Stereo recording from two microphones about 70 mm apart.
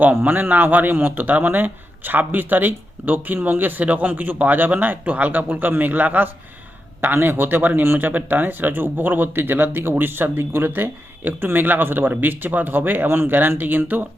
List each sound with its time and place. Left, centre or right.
0.0 s speech: right